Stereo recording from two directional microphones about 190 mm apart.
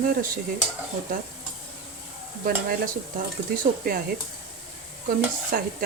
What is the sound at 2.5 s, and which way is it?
Speech, 50° right (ahead or behind).